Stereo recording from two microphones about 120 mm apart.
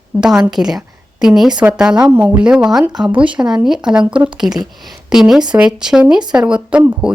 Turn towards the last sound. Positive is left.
turn(degrees=-10)  # may be behind; listen again after turning